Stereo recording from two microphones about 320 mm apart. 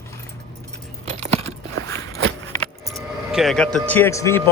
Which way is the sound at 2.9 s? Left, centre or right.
Centre.